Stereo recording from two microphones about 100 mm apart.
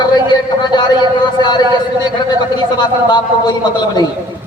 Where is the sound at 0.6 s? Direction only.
45° left (ahead or behind).